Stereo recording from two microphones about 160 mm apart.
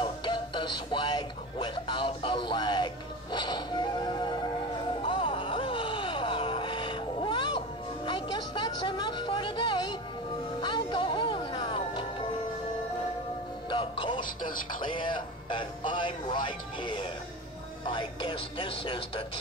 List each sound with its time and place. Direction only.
0.0 s speech: 30° left (ahead or behind)
5.0 s music: 30° left (ahead or behind)
13.7 s music: 30° left (ahead or behind)
14.8 s speech: 30° left (ahead or behind)